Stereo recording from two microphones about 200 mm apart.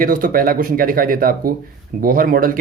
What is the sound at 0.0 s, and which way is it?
Speech, 45° right (ahead or behind).